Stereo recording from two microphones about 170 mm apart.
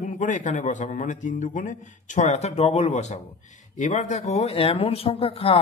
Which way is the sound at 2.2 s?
40° left (ahead or behind).